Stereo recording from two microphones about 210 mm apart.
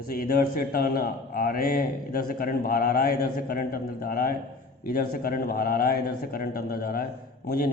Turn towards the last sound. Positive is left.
turn(degrees=45)  # may be behind; listen again after turning